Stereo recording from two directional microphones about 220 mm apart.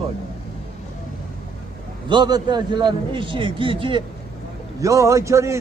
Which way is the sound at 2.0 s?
20° right (ahead or behind).